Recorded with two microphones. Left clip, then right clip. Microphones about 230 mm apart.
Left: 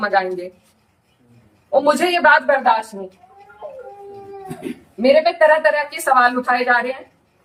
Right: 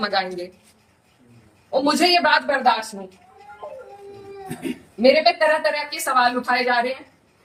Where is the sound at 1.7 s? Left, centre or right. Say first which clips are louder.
Left 2 dB; centre.